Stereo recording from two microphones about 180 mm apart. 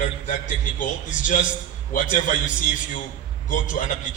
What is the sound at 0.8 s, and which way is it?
A man's voice, 45° left (ahead or behind).